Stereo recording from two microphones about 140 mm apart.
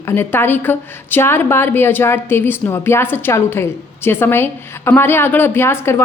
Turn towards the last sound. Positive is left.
turn(degrees=20)  # may be behind; listen again after turning